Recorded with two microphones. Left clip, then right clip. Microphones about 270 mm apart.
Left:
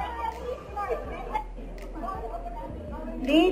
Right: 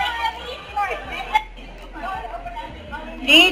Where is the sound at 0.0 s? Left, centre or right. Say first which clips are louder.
Right 9 dB; centre.